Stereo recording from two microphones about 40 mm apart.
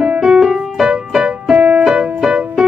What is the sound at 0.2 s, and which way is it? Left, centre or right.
Music, centre.